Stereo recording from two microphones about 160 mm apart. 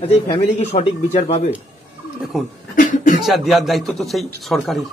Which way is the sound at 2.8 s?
55° left (ahead or behind).